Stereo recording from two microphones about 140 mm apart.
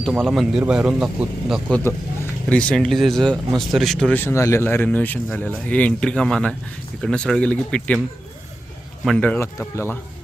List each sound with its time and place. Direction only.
0.0 s speech: 5° left (ahead or behind)
1.7 s speech: 10° left (ahead or behind)
4.1 s speech: 15° left (ahead or behind)
9.0 s speech: 10° left (ahead or behind)